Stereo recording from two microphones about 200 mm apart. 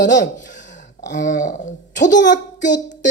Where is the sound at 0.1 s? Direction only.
40° left (ahead or behind).